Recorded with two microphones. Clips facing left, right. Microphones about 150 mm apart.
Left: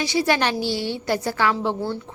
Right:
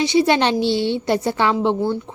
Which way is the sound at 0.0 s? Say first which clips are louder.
Right 5 dB; 25° right (ahead or behind).